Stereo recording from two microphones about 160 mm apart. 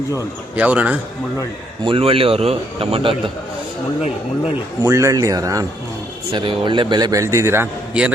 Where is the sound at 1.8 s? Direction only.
35° right (ahead or behind).